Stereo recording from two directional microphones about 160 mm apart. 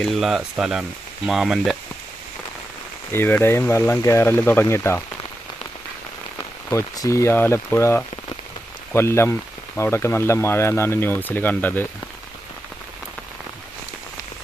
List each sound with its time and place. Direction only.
0.0 s speech: centre (ahead or behind)
3.1 s speech: 15° left (ahead or behind)
6.7 s speech: 20° left (ahead or behind)